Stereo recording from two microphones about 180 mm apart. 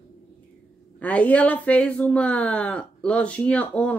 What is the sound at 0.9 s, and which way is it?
Speech, 10° left (ahead or behind).